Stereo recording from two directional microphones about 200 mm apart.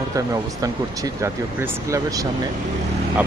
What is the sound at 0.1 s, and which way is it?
Speech, 15° right (ahead or behind).